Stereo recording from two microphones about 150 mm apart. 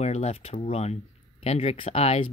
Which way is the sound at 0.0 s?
45° left (ahead or behind).